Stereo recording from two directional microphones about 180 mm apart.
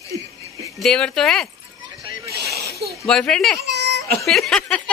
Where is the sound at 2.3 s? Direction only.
60° right (ahead or behind).